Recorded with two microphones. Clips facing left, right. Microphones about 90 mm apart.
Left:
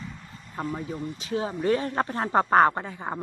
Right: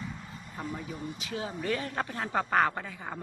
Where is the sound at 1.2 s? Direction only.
35° left (ahead or behind).